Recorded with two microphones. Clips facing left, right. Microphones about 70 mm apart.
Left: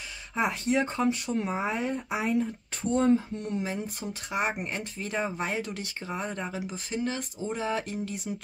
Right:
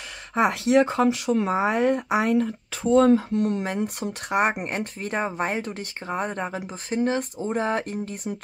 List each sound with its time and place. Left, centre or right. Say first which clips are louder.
0.4 s speech: right 7 dB; right